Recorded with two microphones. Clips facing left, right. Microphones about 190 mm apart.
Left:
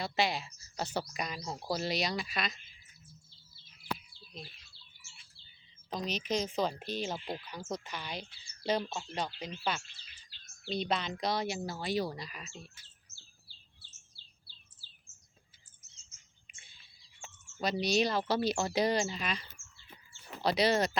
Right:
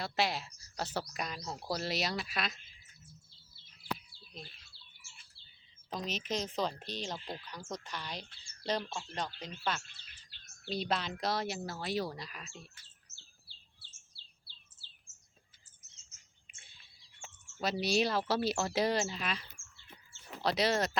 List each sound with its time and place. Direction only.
0.0 s speech: centre (ahead or behind)
5.9 s speech: centre (ahead or behind)
9.8 s bird vocalization: 55° right (ahead or behind)
10.6 s speech: centre (ahead or behind)
16.5 s bird: centre (ahead or behind)
17.2 s speech: 5° right (ahead or behind)